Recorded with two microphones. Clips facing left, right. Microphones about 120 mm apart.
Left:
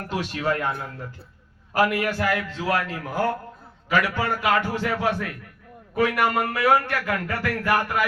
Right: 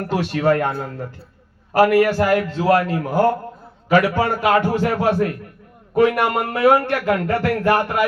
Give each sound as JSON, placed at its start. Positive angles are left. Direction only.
{"t": 0.0, "sound": "speech", "side_deg": -65}
{"t": 2.1, "sound": "a man's voice", "side_deg": -45}
{"t": 6.0, "sound": "a man's voice", "side_deg": -25}